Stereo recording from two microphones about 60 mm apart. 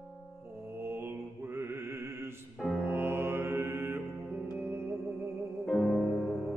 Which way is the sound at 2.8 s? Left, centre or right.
Right.